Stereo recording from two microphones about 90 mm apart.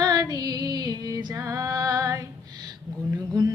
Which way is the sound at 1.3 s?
35° right (ahead or behind).